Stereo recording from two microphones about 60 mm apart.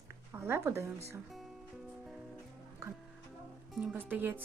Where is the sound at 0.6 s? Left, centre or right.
Right.